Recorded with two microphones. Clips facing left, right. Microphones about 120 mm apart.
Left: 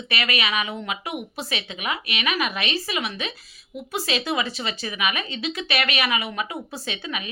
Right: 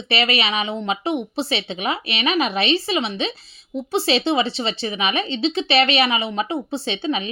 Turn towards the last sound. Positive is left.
turn(degrees=-30)  # may be behind; listen again after turning